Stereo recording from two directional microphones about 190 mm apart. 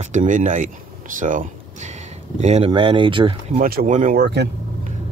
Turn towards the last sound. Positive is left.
turn(degrees=-60)  # may be behind; listen again after turning